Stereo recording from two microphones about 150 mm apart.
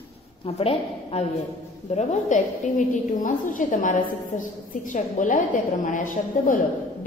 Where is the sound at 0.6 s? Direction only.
40° left (ahead or behind).